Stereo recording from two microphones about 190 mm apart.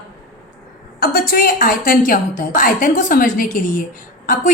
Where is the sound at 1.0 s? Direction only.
50° left (ahead or behind).